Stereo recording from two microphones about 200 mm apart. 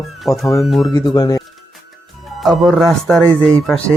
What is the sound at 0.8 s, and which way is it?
Speech, 20° left (ahead or behind).